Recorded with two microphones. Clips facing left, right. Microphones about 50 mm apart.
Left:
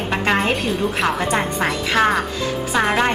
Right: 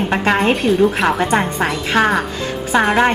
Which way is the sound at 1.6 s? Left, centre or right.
Centre.